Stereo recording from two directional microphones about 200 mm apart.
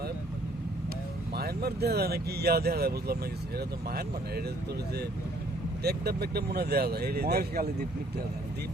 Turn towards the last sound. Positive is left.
turn(degrees=-50)  # may be behind; listen again after turning